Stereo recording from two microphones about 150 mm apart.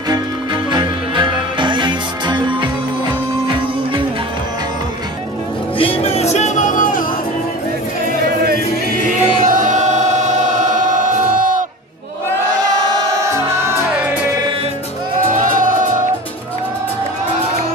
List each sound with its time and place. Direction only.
0.7 s music: 30° right (ahead or behind)
5.8 s music: 40° left (ahead or behind)
6.3 s music: 55° left (ahead or behind)
9.0 s choir: 60° right (ahead or behind)
15.3 s music: 60° right (ahead or behind)